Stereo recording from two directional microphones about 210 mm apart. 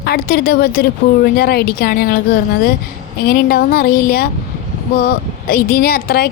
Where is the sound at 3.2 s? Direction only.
45° left (ahead or behind).